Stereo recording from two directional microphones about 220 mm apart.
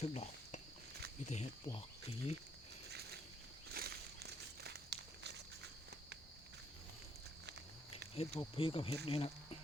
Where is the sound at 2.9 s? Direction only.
45° right (ahead or behind).